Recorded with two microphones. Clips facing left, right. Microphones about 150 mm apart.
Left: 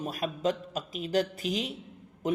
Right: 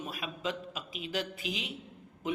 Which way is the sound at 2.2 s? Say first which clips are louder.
Left 5 dB; 40° left (ahead or behind).